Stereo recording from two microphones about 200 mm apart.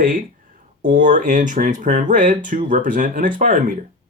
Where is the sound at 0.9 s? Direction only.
40° right (ahead or behind).